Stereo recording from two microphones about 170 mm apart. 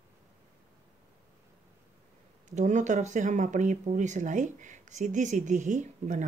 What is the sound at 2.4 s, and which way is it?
Speech, 45° right (ahead or behind).